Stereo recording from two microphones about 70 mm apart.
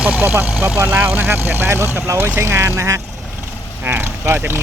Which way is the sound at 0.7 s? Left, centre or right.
Right.